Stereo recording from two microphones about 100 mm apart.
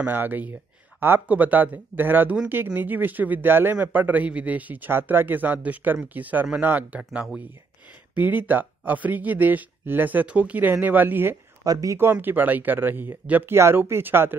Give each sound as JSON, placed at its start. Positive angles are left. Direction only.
{"t": 0.0, "sound": "speech", "side_deg": -20}
{"t": 7.0, "sound": "speech", "side_deg": -5}
{"t": 8.1, "sound": "speech", "side_deg": -15}
{"t": 11.6, "sound": "speech", "side_deg": -35}
{"t": 12.0, "sound": "speech", "side_deg": -20}